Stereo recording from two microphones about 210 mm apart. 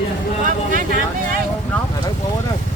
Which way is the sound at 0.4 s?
40° right (ahead or behind).